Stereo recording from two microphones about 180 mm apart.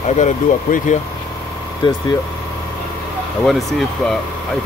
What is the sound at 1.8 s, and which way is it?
Speech, 25° left (ahead or behind).